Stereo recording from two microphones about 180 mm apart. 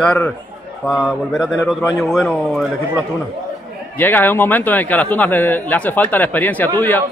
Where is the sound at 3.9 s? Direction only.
10° left (ahead or behind).